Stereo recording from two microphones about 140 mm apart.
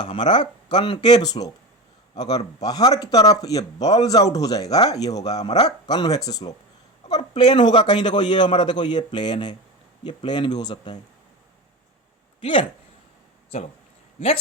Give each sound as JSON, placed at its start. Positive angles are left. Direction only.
{"t": 0.0, "sound": "a man's voice", "side_deg": 35}
{"t": 7.5, "sound": "a man's voice", "side_deg": 35}
{"t": 12.4, "sound": "speech", "side_deg": 40}